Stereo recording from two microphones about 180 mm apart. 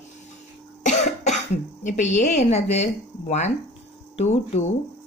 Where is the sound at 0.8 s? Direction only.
40° left (ahead or behind).